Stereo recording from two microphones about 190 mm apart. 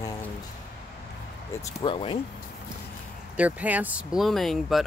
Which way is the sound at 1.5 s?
15° left (ahead or behind).